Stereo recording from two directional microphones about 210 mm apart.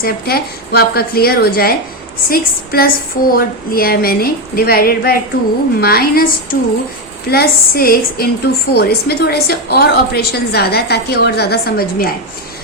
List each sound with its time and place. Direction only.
0.0 s a woman's voice: 45° left (ahead or behind)